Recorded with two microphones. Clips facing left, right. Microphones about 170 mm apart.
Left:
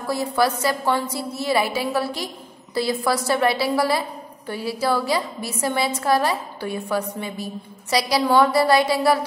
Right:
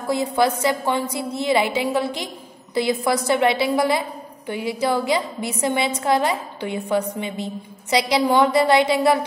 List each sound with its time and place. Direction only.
0.0 s a woman's voice: 20° right (ahead or behind)